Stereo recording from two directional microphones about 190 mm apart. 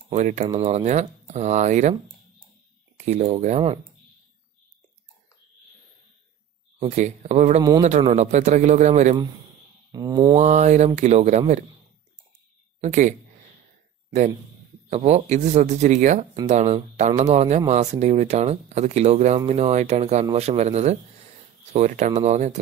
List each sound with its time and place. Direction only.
0.1 s speech: 40° right (ahead or behind)
3.1 s speech: 35° right (ahead or behind)
6.8 s speech: 35° right (ahead or behind)
9.9 s mantra: 20° right (ahead or behind)
10.3 s speech: 40° right (ahead or behind)
12.8 s speech: 40° right (ahead or behind)
14.9 s speech: 35° right (ahead or behind)